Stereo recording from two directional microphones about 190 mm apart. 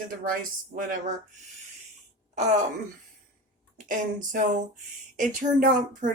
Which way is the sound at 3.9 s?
45° right (ahead or behind).